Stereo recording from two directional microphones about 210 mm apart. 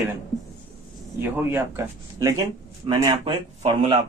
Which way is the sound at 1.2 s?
10° right (ahead or behind).